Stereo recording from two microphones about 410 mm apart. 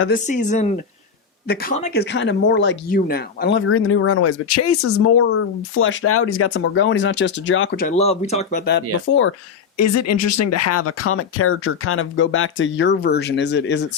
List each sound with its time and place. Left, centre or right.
0.3 s speech: centre
9.7 s speech: left